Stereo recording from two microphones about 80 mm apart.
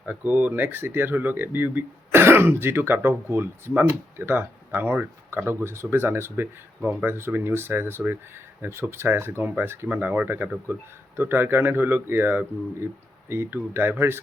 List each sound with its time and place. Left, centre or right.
0.0 s speech: centre